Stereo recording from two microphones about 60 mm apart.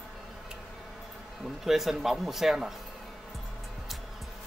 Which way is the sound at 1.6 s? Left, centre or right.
Centre.